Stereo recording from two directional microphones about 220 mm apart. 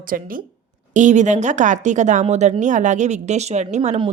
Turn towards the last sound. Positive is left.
turn(degrees=-25)  # may be behind; listen again after turning